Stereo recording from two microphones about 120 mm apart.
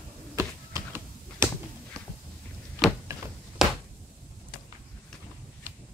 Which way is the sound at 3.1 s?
25° right (ahead or behind).